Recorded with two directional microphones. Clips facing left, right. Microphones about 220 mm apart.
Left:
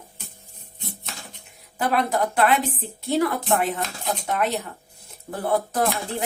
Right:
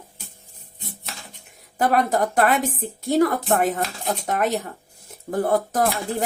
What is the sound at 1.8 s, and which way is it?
A woman's voice, 45° right (ahead or behind).